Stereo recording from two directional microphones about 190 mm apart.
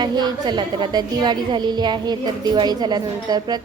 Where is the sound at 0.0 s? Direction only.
20° right (ahead or behind).